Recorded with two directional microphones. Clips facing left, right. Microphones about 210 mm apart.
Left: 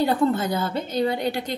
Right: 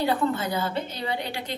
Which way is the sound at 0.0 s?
45° left (ahead or behind).